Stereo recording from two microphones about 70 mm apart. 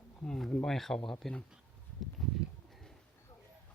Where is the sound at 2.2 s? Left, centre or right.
Centre.